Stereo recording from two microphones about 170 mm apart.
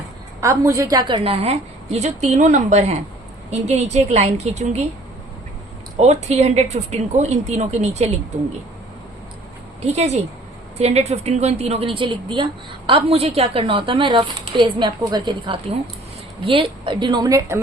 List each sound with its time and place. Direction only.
0.4 s a woman's voice: 15° right (ahead or behind); by 4.8 s 40° right (ahead or behind)
6.0 s a woman's voice: 40° right (ahead or behind)
9.8 s a woman's voice: 40° right (ahead or behind); by 17.6 s 20° right (ahead or behind)